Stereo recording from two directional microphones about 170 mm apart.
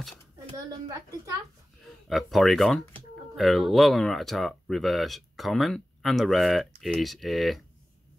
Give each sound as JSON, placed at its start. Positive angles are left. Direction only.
{"t": 0.6, "sound": "a woman's voice", "side_deg": -20}
{"t": 2.0, "sound": "speech", "side_deg": 0}